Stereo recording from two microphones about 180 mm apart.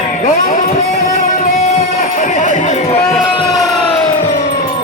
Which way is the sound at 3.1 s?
Centre (ahead or behind).